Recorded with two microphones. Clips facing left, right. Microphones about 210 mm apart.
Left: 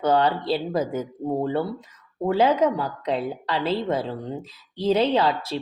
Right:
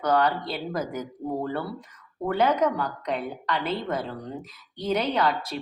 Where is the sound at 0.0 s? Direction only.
25° left (ahead or behind).